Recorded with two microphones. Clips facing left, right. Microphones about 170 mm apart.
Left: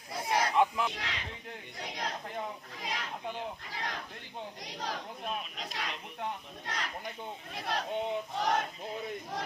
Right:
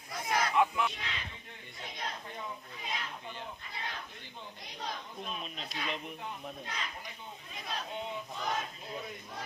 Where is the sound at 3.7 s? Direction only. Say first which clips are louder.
Left 3 dB; 85° left; by 8.6 s 70° left (ahead or behind).